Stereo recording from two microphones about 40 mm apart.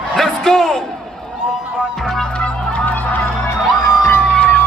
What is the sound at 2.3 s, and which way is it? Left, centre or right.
Run, left.